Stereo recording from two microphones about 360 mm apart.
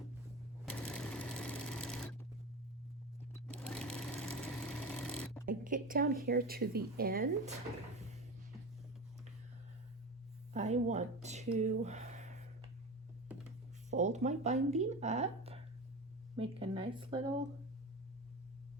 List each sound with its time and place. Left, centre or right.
0.6 s sewing machine: centre
3.3 s sewing machine: centre
5.5 s speech: right
10.5 s a sound: centre
13.9 s speech: centre